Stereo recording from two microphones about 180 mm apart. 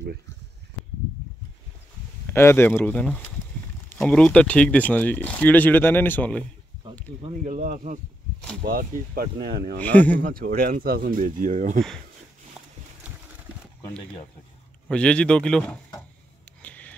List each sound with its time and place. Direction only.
2.3 s speech: 15° left (ahead or behind)
7.4 s speech: 45° right (ahead or behind)
9.8 s speech: 10° left (ahead or behind)
10.2 s speech: 50° right (ahead or behind)
14.9 s speech: 5° left (ahead or behind)
16.6 s a sound: 10° left (ahead or behind)